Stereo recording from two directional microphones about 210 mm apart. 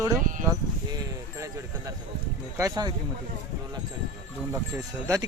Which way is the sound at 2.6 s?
15° right (ahead or behind).